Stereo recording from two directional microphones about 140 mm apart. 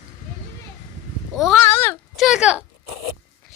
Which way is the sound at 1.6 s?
15° left (ahead or behind).